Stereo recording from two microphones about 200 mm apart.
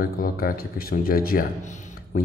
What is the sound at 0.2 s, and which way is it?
Speech, 45° left (ahead or behind).